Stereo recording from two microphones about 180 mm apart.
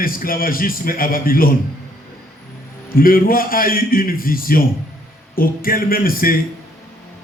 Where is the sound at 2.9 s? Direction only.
55° left (ahead or behind).